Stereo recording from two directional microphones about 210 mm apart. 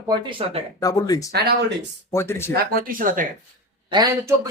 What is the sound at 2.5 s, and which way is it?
Speech, 45° right (ahead or behind).